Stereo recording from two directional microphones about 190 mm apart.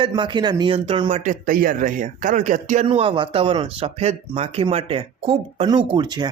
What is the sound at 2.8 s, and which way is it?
Speech, 25° right (ahead or behind).